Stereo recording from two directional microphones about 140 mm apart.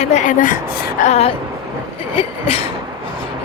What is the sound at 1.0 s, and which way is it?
Speech, 50° left (ahead or behind).